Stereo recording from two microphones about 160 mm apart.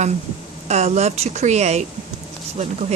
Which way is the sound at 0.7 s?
45° right (ahead or behind).